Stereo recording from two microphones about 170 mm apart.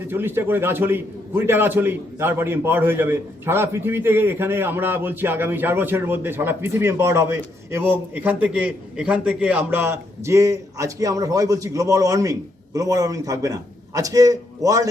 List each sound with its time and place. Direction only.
0.1 s a man's voice: 15° right (ahead or behind)